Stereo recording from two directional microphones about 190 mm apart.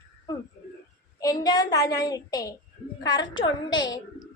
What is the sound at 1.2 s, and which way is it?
A woman's voice, 20° left (ahead or behind).